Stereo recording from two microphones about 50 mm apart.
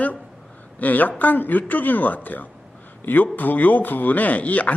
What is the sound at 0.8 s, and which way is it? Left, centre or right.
Speech, left.